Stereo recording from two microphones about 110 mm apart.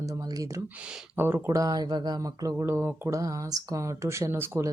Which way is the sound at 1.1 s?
20° right (ahead or behind).